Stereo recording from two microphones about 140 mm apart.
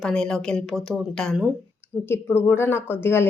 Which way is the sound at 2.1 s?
15° left (ahead or behind).